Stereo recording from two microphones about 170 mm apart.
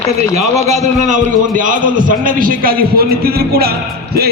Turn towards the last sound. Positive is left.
turn(degrees=-65)  # may be behind; listen again after turning